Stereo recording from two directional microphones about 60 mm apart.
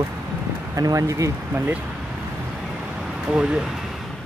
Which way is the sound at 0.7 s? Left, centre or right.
Right.